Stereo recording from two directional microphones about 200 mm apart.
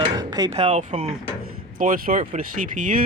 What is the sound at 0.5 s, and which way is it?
Speech, 30° right (ahead or behind).